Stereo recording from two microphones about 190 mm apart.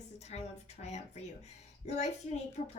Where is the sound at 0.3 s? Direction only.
35° left (ahead or behind).